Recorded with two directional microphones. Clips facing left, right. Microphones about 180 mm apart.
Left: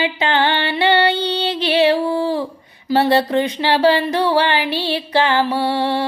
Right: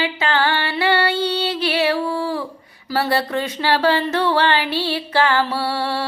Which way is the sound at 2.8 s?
20° left (ahead or behind).